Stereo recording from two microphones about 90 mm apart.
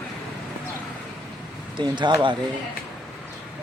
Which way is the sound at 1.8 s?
60° right (ahead or behind).